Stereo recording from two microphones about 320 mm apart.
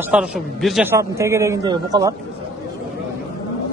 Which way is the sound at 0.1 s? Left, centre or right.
Centre.